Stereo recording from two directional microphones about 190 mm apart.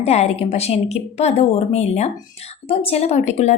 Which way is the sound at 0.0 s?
35° left (ahead or behind).